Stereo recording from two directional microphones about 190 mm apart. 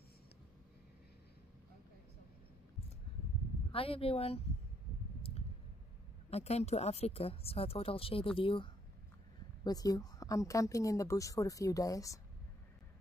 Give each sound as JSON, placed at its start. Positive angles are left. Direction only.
{"t": 3.7, "sound": "speech", "side_deg": 30}
{"t": 6.3, "sound": "speech", "side_deg": 35}
{"t": 9.7, "sound": "a woman's voice", "side_deg": 20}